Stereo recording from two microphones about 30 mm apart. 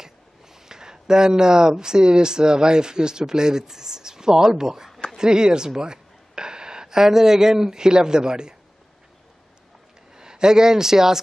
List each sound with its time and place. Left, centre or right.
0.0 s speech: centre
10.1 s speech: right